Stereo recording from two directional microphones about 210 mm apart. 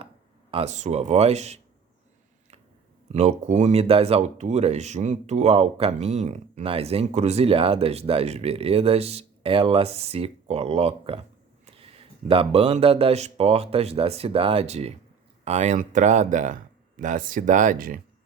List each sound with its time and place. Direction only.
0.5 s speech: 30° right (ahead or behind)
3.1 s speech: 30° right (ahead or behind)
12.3 s speech: 25° right (ahead or behind); by 18.0 s 40° right (ahead or behind)